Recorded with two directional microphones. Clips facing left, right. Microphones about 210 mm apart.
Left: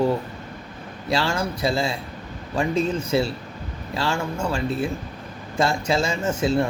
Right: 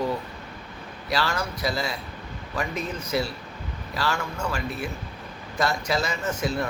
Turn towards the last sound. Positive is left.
turn(degrees=30)  # may be behind; listen again after turning